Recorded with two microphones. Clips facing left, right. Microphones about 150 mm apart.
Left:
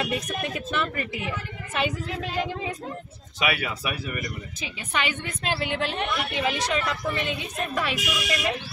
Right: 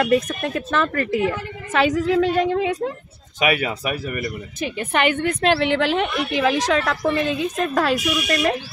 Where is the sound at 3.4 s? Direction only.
50° right (ahead or behind); by 7.8 s 90° right.